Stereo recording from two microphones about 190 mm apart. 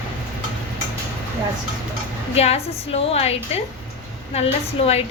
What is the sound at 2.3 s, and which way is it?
A woman's voice, 35° left (ahead or behind).